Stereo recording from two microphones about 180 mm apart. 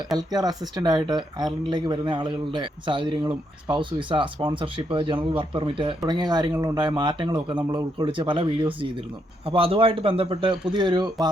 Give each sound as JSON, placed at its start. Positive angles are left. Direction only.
{"t": 0.2, "sound": "a woman's voice", "side_deg": -20}